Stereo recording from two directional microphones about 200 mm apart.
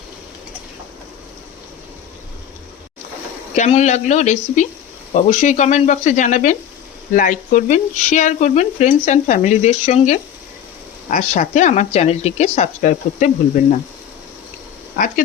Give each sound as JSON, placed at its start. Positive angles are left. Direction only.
{"t": 3.5, "sound": "speech", "side_deg": 35}
{"t": 14.9, "sound": "speech", "side_deg": 40}